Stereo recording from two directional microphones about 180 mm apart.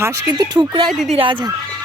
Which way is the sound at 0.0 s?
20° right (ahead or behind).